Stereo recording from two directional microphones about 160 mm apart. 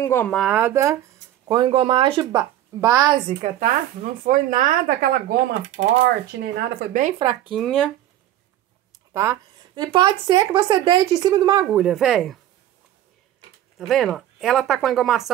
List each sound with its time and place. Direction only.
0.0 s speech: 15° left (ahead or behind)
0.4 s speech: 10° right (ahead or behind)
1.5 s speech: 30° right (ahead or behind)
2.8 s speech: 20° right (ahead or behind)
3.5 s speech: 55° right (ahead or behind)
6.0 s speech: 90° right
7.2 s speech: 30° right (ahead or behind)
7.5 s speech: centre (ahead or behind)
9.1 s speech: 20° right (ahead or behind)
11.6 s speech: 5° right (ahead or behind)
13.7 s speech: centre (ahead or behind)